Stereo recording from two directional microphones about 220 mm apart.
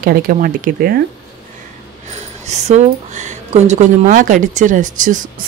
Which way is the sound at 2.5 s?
30° right (ahead or behind).